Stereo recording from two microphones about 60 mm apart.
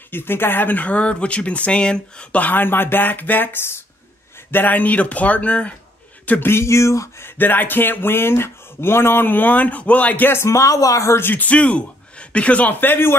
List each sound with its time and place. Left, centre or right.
0.1 s speech: left
4.5 s speech: left
6.4 s speech: left
7.2 s speech: left
10.3 s speech: left
10.6 s speech: left
11.1 s speech: left
11.4 s speech: left
12.8 s speech: left